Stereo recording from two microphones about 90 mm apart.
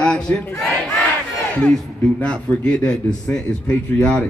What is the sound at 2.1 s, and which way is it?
A man's voice, 15° left (ahead or behind).